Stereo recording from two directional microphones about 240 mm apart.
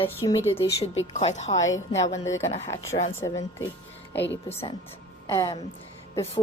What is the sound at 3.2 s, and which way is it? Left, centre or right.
Speech, centre.